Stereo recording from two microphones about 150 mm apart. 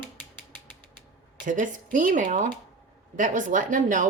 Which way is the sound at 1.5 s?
60° right (ahead or behind).